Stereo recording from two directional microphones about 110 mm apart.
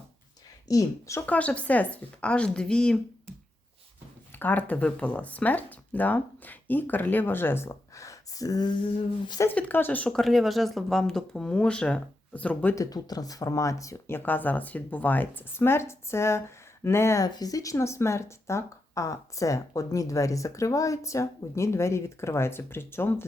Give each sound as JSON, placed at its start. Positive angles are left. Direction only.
{"t": 0.7, "sound": "speech", "side_deg": 30}
{"t": 1.3, "sound": "a woman's voice", "side_deg": 10}
{"t": 4.3, "sound": "speech", "side_deg": 15}
{"t": 8.8, "sound": "a sound", "side_deg": 45}
{"t": 9.4, "sound": "a woman's voice", "side_deg": 15}
{"t": 10.1, "sound": "speech", "side_deg": 0}
{"t": 12.7, "sound": "speech", "side_deg": 35}
{"t": 17.2, "sound": "speech", "side_deg": 35}